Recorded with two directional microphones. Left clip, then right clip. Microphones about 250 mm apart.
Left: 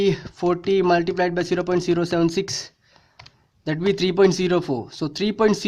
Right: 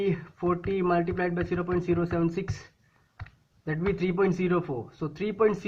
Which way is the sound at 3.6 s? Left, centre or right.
Left.